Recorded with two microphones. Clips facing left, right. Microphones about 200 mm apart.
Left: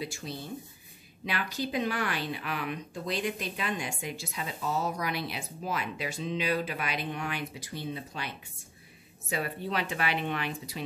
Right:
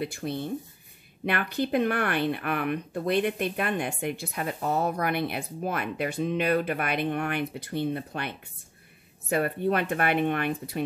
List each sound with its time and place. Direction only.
0.0 s speech: 55° right (ahead or behind)